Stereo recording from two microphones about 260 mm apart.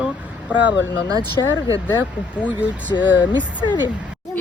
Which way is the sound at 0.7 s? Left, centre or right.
Left.